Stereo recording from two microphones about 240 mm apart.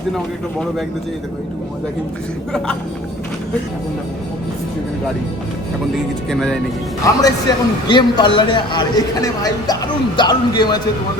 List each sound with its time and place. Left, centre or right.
6.3 s speech: centre
7.0 s a man's voice: centre